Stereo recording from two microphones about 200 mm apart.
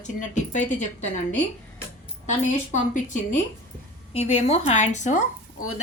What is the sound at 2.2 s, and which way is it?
Speech, 40° left (ahead or behind).